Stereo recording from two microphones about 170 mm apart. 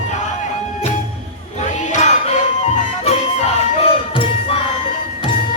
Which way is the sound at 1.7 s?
45° left (ahead or behind).